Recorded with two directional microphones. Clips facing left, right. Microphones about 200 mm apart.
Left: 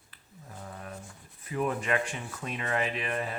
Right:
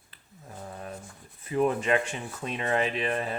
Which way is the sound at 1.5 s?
25° right (ahead or behind).